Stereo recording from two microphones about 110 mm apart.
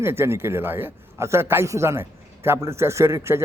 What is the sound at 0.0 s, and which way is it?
A man's voice, 25° right (ahead or behind).